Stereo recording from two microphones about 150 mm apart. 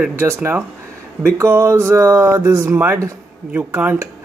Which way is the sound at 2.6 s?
10° right (ahead or behind).